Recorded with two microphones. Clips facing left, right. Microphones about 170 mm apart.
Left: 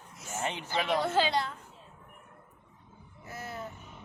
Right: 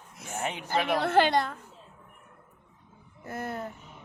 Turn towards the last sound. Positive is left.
turn(degrees=-55)  # may be behind; listen again after turning